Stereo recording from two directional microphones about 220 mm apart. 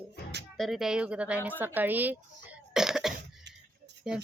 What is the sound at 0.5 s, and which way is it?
A woman's voice, centre (ahead or behind).